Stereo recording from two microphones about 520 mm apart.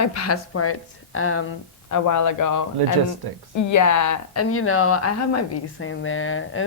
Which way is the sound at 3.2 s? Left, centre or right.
Right.